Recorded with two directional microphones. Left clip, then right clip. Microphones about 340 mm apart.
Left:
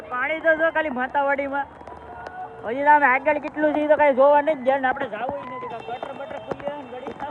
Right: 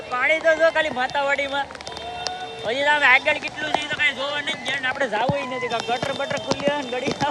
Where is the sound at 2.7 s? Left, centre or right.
Centre.